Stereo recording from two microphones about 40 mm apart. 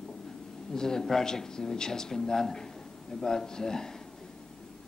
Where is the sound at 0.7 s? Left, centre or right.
Centre.